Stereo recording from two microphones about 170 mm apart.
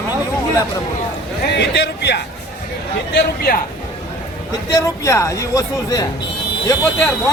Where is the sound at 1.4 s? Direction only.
85° left.